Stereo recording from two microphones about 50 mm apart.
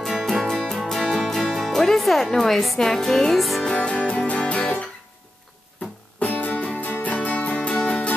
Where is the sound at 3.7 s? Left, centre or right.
Left.